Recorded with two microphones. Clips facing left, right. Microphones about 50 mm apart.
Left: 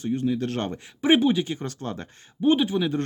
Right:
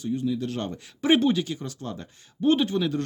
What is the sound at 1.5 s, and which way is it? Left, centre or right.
Speech, left.